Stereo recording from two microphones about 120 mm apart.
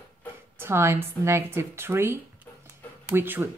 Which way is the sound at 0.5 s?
20° right (ahead or behind).